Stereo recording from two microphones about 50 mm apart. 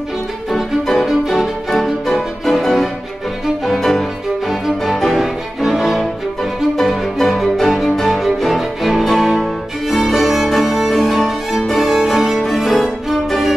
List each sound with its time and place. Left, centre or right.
0.5 s music: centre